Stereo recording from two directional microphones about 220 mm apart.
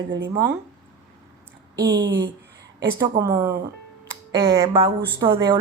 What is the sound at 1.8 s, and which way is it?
Speech, 15° right (ahead or behind).